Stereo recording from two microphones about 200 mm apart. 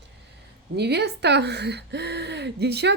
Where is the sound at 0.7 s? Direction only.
55° right (ahead or behind).